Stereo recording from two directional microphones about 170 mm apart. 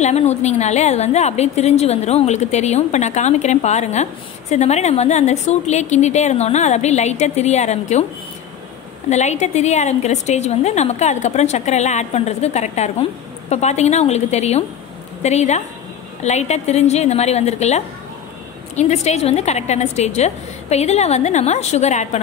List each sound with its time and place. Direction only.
0.0 s a woman's voice: 40° left (ahead or behind)
9.1 s a woman's voice: 40° left (ahead or behind)